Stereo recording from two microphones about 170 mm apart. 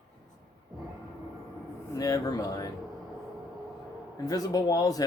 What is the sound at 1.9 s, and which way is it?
Speech, 20° left (ahead or behind).